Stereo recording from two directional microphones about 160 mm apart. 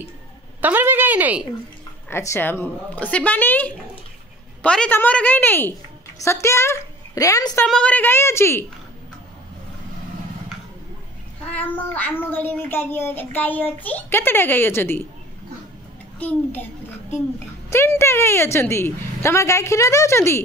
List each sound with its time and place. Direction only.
0.6 s a woman's voice: 10° right (ahead or behind)
2.0 s a woman's voice: 15° left (ahead or behind)
7.6 s speech: 5° left (ahead or behind)
11.5 s speech: 10° left (ahead or behind)
16.2 s speech: 10° left (ahead or behind)
17.6 s speech: 15° left (ahead or behind)